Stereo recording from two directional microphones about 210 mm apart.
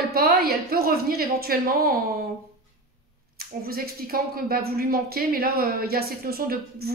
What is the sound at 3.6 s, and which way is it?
Speech, 45° right (ahead or behind).